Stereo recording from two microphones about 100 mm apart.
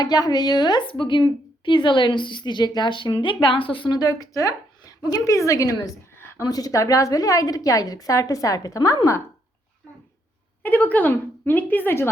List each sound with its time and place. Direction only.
0.0 s a woman's voice: 40° left (ahead or behind); by 6.4 s 25° left (ahead or behind)
6.5 s a woman's voice: 40° left (ahead or behind)
10.6 s speech: 15° left (ahead or behind)